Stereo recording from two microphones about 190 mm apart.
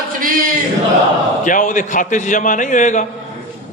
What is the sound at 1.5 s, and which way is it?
Speech, 40° left (ahead or behind).